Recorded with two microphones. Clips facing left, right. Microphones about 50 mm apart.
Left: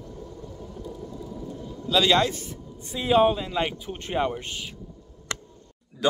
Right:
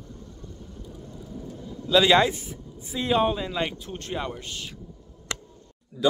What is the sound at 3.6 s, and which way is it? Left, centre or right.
A man's voice, centre.